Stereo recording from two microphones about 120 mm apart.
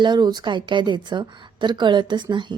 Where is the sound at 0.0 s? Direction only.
35° right (ahead or behind).